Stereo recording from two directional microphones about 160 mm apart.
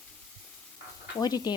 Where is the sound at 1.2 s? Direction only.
25° left (ahead or behind).